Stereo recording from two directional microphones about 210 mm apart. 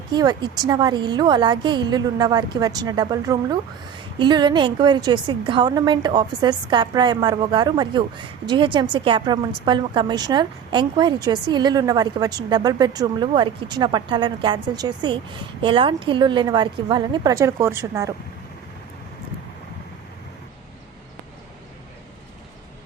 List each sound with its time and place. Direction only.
0.1 s a woman's voice: 20° right (ahead or behind)